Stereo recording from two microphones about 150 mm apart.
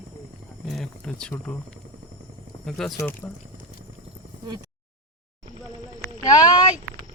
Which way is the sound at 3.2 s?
15° left (ahead or behind).